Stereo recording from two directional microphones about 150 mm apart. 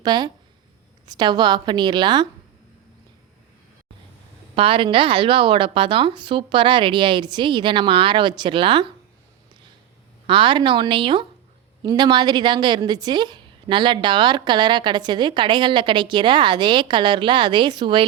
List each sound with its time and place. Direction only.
0.0 s a woman's voice: 30° right (ahead or behind)
4.5 s a woman's voice: 35° right (ahead or behind)
10.2 s a woman's voice: 35° right (ahead or behind)